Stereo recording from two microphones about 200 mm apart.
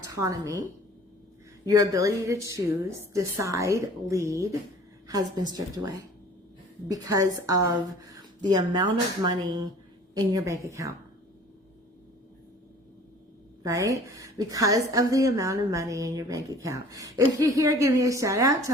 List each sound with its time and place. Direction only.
0.1 s a woman's voice: 15° right (ahead or behind)
1.6 s a woman's voice: 20° right (ahead or behind)
6.9 s a woman's voice: 15° right (ahead or behind)
13.6 s a woman's voice: 15° right (ahead or behind)